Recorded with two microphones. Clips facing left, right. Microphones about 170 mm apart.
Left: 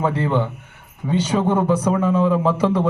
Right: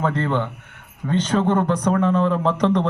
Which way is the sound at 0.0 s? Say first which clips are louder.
Left 2 dB; 10° left (ahead or behind).